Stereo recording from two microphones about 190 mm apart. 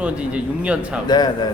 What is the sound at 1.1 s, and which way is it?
Speech, 20° left (ahead or behind).